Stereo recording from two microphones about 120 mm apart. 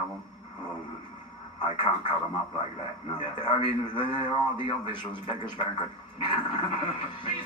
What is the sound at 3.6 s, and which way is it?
A man's voice, 45° left (ahead or behind).